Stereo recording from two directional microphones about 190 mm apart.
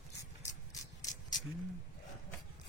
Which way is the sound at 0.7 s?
20° left (ahead or behind).